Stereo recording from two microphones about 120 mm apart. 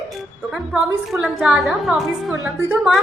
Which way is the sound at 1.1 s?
Centre (ahead or behind).